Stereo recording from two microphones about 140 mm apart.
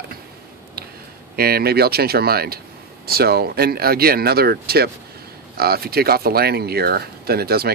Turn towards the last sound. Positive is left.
turn(degrees=-90)